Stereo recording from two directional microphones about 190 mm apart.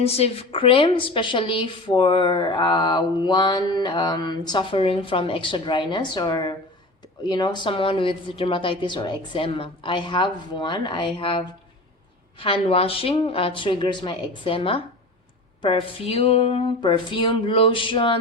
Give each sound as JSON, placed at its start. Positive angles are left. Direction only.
{"t": 0.0, "sound": "a woman's voice", "side_deg": 30}